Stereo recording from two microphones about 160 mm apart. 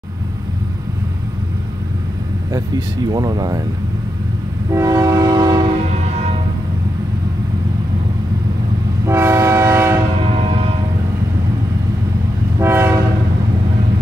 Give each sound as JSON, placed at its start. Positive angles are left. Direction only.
{"t": 2.5, "sound": "speech", "side_deg": -25}
{"t": 4.7, "sound": "train", "side_deg": -20}
{"t": 6.1, "sound": "music", "side_deg": -40}
{"t": 9.0, "sound": "train", "side_deg": -15}
{"t": 10.4, "sound": "vehicle", "side_deg": -35}
{"t": 12.5, "sound": "train", "side_deg": -15}